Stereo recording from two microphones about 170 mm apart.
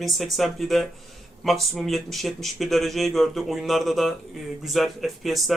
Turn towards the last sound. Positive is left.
turn(degrees=0)  # may be behind; listen again after turning